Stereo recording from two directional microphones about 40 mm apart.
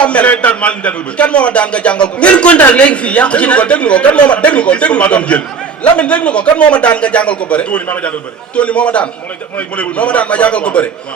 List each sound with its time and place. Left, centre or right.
0.0 s a man's voice: left